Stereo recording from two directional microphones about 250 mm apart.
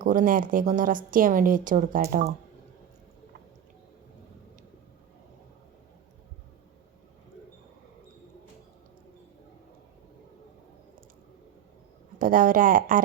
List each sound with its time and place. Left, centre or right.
0.0 s speech: right
12.2 s speech: right